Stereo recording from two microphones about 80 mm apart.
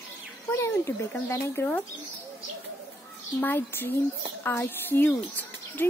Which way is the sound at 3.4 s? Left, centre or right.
Left.